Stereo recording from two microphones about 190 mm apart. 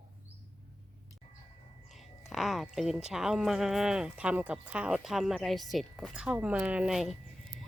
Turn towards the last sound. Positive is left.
turn(degrees=-5)  # may be behind; listen again after turning